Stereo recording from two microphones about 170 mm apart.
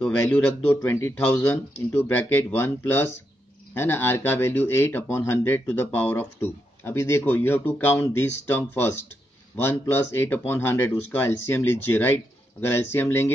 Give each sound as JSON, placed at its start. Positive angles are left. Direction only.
{"t": 0.0, "sound": "speech", "side_deg": 10}